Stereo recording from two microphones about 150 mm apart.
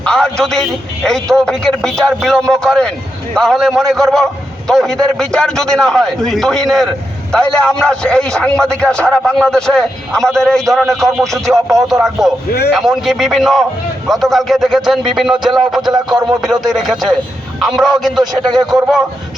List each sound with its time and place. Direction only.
0.0 s a man's voice: 5° left (ahead or behind)
12.5 s a man's voice: 90° left
12.7 s a man's voice: centre (ahead or behind)
18.2 s speech: 30° right (ahead or behind)